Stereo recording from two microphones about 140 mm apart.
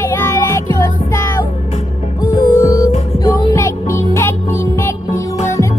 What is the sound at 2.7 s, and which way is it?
Music, 20° left (ahead or behind).